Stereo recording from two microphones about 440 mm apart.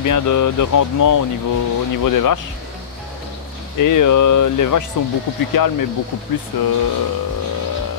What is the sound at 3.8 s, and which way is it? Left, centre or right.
Speech, left.